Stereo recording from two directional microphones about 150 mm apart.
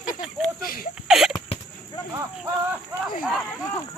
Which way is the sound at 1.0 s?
Centre (ahead or behind).